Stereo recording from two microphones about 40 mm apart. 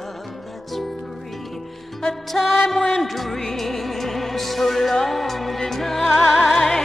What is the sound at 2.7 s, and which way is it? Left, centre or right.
Music, centre.